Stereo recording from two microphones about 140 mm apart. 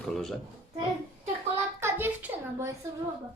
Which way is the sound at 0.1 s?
5° left (ahead or behind).